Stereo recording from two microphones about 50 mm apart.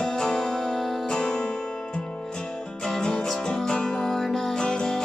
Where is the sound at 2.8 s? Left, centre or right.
Centre.